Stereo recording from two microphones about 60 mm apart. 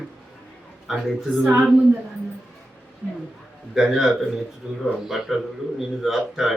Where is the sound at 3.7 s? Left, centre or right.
Centre.